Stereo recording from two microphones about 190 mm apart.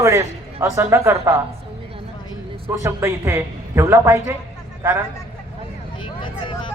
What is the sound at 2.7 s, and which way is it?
A woman's voice, 15° right (ahead or behind).